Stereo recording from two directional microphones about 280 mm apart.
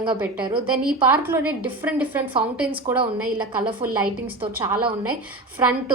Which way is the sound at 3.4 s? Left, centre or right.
Centre.